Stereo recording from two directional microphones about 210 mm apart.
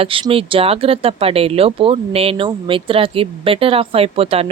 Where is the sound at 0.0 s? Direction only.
25° right (ahead or behind).